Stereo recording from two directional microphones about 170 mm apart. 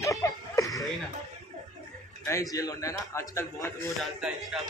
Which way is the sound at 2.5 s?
20° left (ahead or behind).